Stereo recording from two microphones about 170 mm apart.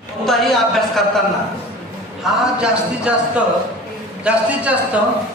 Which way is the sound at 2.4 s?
5° right (ahead or behind).